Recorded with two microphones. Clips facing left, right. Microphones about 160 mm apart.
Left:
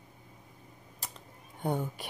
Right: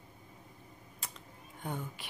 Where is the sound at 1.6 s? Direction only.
35° left (ahead or behind).